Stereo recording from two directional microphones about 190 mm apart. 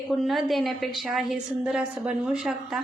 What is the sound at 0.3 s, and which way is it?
A woman's voice, centre (ahead or behind).